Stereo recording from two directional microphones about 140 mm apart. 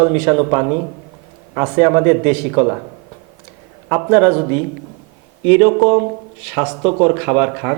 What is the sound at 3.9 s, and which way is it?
Speech, 15° right (ahead or behind).